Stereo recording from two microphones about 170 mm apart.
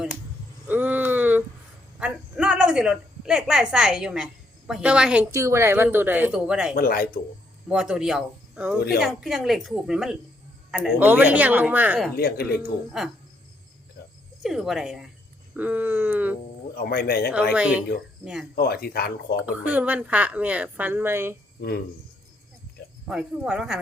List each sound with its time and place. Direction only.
0.7 s a sound: 10° right (ahead or behind)
2.0 s a woman's voice: 5° right (ahead or behind)
5.3 s a woman's voice: 15° right (ahead or behind)
6.7 s speech: 60° left (ahead or behind)
7.7 s a woman's voice: 5° right (ahead or behind)
12.1 s speech: 65° left (ahead or behind)
13.0 s a woman's voice: centre (ahead or behind)
14.4 s a woman's voice: centre (ahead or behind)
16.7 s speech: 65° left (ahead or behind)
17.5 s a woman's voice: 5° right (ahead or behind)
18.5 s speech: 65° left (ahead or behind)
19.5 s a woman's voice: 10° right (ahead or behind)
23.0 s a woman's voice: 5° right (ahead or behind)